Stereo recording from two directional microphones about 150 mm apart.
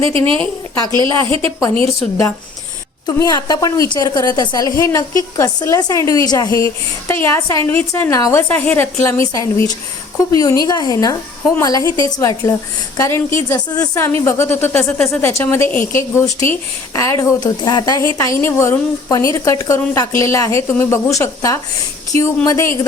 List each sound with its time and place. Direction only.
0.0 s a woman's voice: 35° right (ahead or behind)
3.1 s a woman's voice: 25° left (ahead or behind)